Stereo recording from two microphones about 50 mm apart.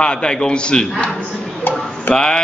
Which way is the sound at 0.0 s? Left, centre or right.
Centre.